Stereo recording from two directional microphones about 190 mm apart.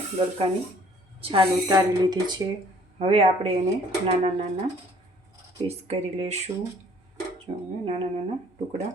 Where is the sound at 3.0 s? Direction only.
35° right (ahead or behind).